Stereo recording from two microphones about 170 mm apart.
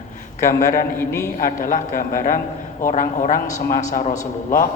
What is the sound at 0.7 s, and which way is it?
Speech, 15° left (ahead or behind).